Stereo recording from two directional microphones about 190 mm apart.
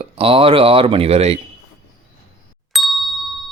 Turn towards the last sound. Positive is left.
turn(degrees=0)  # may be behind; listen again after turning